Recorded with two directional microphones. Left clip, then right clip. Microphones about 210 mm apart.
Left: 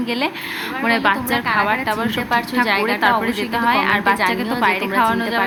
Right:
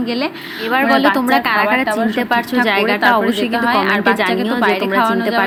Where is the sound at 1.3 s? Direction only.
35° right (ahead or behind).